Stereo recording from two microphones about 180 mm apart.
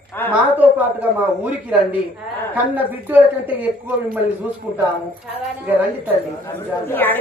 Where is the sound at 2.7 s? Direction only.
10° right (ahead or behind).